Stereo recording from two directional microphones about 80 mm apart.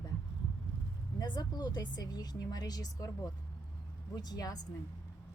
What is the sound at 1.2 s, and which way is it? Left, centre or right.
A woman's voice, left.